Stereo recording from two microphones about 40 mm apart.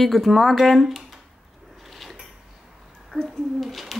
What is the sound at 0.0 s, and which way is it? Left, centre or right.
Speech, centre.